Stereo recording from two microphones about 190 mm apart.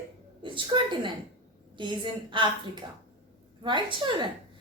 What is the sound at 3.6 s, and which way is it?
Speech, 25° right (ahead or behind).